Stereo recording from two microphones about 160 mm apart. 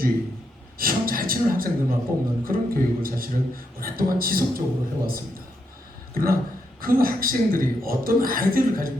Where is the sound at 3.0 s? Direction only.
65° right (ahead or behind).